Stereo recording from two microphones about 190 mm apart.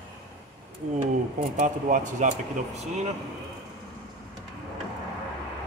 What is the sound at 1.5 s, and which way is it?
Speech, 40° right (ahead or behind).